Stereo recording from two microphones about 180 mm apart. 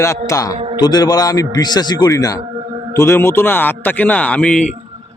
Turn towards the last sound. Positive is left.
turn(degrees=5)  # may be behind; listen again after turning